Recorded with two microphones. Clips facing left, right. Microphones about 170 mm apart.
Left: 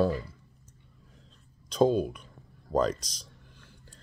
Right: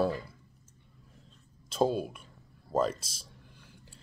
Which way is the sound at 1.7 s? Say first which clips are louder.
Left 4 dB; 5° right (ahead or behind).